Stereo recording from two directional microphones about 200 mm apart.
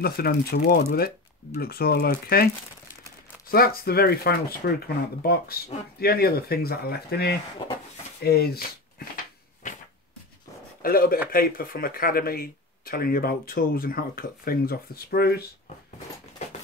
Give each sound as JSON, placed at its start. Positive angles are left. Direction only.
{"t": 0.0, "sound": "speech", "side_deg": 50}
{"t": 9.1, "sound": "a sound", "side_deg": 40}
{"t": 10.8, "sound": "speech", "side_deg": 45}